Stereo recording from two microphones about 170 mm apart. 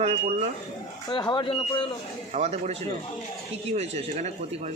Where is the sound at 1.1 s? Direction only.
25° left (ahead or behind).